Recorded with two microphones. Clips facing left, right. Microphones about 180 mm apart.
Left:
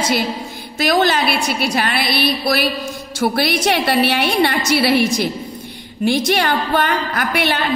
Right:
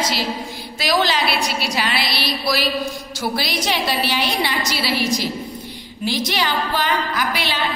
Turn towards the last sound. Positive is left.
turn(degrees=50)  # may be behind; listen again after turning